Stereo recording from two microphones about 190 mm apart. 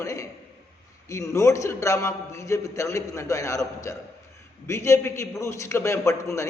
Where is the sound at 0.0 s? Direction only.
15° left (ahead or behind).